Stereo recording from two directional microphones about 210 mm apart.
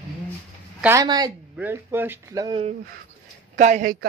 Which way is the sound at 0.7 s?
10° right (ahead or behind).